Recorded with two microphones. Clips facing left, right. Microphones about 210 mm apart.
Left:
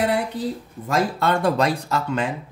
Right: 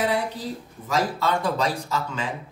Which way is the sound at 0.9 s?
60° left (ahead or behind).